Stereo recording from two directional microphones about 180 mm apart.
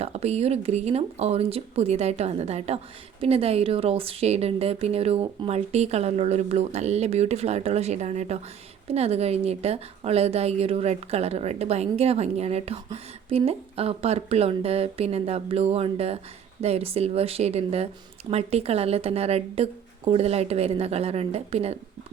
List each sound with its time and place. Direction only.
0.0 s a woman's voice: 35° right (ahead or behind)